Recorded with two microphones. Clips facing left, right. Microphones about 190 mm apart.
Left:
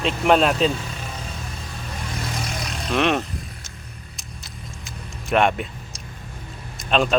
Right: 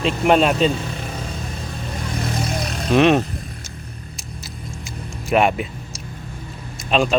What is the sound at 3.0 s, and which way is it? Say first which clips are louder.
Speech: right 6 dB; 15° right (ahead or behind).